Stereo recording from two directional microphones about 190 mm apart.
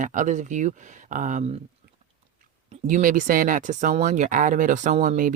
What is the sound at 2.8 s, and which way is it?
Speech, 45° right (ahead or behind).